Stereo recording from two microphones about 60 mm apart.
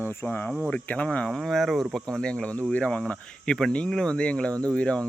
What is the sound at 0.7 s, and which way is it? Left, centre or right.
Speech, left.